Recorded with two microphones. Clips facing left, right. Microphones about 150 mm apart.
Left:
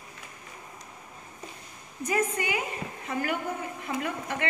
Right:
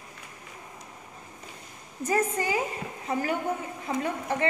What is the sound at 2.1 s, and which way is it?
A woman's voice, 35° right (ahead or behind).